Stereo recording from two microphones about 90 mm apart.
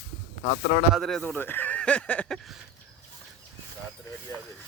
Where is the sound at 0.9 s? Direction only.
5° left (ahead or behind).